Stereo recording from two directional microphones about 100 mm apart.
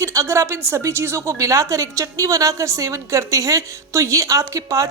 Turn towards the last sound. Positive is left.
turn(degrees=-35)  # may be behind; listen again after turning